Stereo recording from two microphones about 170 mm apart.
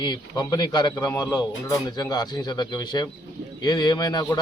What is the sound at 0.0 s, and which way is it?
A man's voice, 25° left (ahead or behind).